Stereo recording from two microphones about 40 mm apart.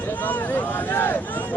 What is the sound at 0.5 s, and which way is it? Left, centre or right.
Vehicle, left.